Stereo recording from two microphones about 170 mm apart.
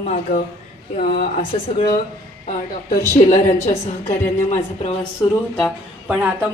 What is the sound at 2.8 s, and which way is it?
Speech, 50° left (ahead or behind).